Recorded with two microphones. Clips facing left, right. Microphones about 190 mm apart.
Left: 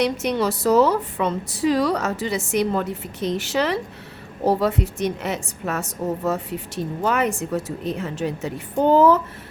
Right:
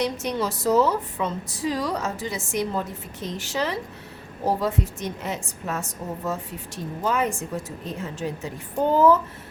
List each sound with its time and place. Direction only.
0.0 s a woman's voice: 70° left (ahead or behind)